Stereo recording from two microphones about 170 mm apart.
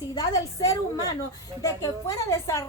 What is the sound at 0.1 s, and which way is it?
A woman's voice, 20° left (ahead or behind).